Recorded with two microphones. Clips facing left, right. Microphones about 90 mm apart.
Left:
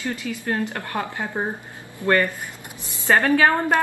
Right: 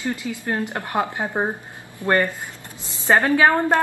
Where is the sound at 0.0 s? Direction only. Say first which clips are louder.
Right 1 dB; 20° right (ahead or behind).